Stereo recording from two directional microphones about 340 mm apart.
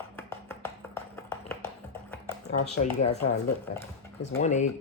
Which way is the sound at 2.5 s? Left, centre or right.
Centre.